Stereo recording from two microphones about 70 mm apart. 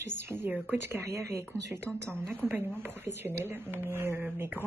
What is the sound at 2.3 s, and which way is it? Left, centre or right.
Speech, right.